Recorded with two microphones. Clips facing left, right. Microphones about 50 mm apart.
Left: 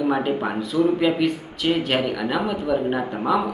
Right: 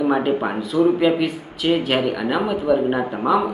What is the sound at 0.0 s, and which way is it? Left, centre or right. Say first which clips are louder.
Speech: right 3 dB; centre.